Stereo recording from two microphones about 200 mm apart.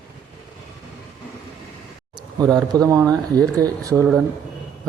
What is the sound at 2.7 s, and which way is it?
Speech, 15° right (ahead or behind).